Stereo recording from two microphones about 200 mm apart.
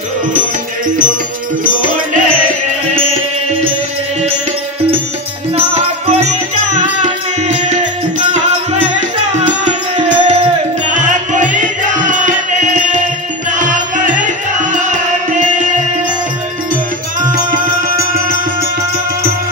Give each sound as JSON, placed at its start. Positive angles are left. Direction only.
{"t": 5.8, "sound": "music", "side_deg": -30}
{"t": 9.3, "sound": "music", "side_deg": -35}